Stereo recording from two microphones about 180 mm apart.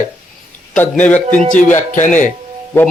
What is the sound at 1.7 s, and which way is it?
Speech, 45° left (ahead or behind).